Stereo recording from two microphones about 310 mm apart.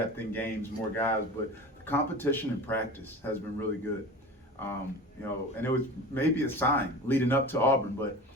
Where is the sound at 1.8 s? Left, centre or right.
Centre.